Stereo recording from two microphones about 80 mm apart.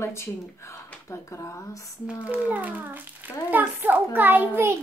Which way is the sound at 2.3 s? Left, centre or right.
Centre.